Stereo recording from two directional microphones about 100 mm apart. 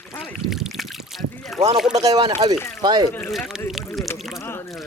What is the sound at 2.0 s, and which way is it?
Speech, 40° right (ahead or behind).